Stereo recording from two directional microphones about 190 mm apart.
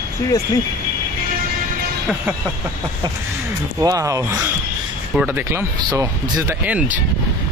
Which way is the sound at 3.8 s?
15° right (ahead or behind).